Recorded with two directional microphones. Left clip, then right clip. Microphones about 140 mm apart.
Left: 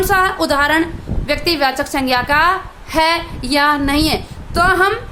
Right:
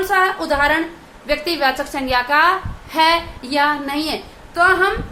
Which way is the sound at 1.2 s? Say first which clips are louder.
Left 2 dB; 50° left (ahead or behind).